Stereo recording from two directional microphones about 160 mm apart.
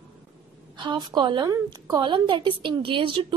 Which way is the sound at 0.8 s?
30° right (ahead or behind).